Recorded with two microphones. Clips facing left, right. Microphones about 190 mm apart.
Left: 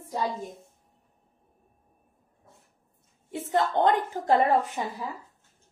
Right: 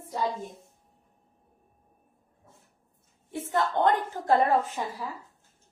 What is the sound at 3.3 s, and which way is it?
A woman's voice, 20° left (ahead or behind).